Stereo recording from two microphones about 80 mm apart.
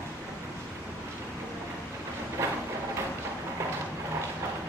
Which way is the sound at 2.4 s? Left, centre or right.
Right.